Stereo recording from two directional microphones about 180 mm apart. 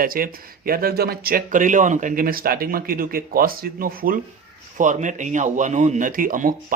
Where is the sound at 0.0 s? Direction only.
50° right (ahead or behind).